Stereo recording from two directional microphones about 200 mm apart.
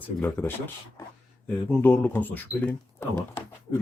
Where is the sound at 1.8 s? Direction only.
10° left (ahead or behind).